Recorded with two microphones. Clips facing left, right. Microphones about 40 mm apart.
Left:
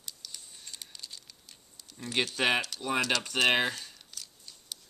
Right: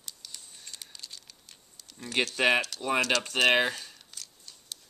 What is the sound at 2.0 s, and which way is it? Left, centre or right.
Speech, centre.